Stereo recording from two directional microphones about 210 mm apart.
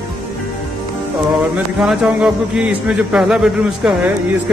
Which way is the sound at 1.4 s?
5° right (ahead or behind).